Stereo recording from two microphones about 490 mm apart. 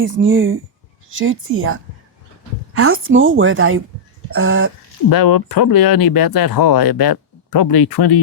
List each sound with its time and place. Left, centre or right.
0.0 s a woman's voice: right
5.0 s speech: left